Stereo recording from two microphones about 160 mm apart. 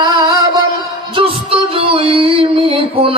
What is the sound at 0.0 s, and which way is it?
Music, 25° right (ahead or behind).